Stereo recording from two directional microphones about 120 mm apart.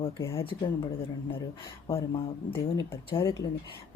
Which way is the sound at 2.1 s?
50° left (ahead or behind).